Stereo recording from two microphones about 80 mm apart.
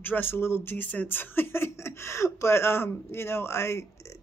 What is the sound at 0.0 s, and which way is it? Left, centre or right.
A woman's voice, left.